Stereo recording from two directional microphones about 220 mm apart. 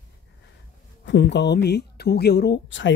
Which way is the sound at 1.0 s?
55° left (ahead or behind).